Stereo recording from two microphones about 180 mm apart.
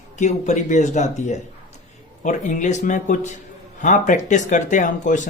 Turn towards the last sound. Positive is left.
turn(degrees=45)  # may be behind; listen again after turning